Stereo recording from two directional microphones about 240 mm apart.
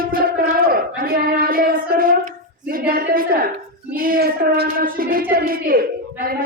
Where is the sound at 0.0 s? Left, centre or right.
Right.